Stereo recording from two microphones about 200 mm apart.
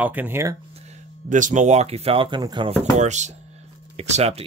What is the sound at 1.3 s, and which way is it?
Speech, 40° right (ahead or behind).